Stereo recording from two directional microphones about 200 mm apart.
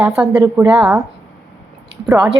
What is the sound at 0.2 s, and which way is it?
Speech, 10° right (ahead or behind).